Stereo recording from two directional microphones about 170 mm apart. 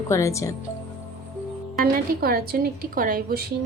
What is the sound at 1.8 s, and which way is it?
A woman's voice, 60° right (ahead or behind).